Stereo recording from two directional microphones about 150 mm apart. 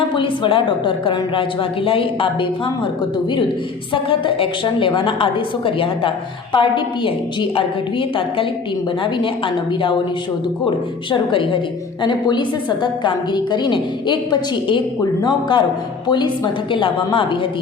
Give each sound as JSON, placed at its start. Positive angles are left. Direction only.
{"t": 0.1, "sound": "a woman's voice", "side_deg": 35}
{"t": 3.9, "sound": "a woman's voice", "side_deg": 35}
{"t": 11.1, "sound": "a woman's voice", "side_deg": 35}